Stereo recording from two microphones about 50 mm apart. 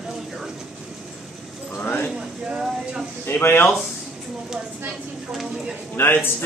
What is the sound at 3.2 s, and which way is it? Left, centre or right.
Speech, left.